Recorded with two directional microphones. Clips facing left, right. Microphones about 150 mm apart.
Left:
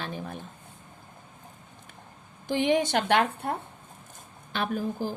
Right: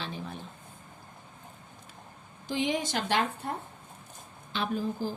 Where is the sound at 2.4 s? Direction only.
60° left (ahead or behind).